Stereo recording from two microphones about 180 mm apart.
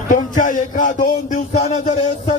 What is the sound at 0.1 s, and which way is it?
A man's voice, 45° left (ahead or behind).